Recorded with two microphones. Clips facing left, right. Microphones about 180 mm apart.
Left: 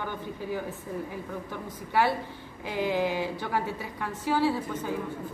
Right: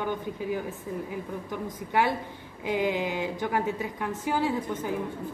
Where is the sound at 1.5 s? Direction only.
15° right (ahead or behind).